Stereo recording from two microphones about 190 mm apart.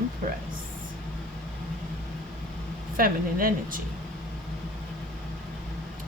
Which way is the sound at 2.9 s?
50° right (ahead or behind).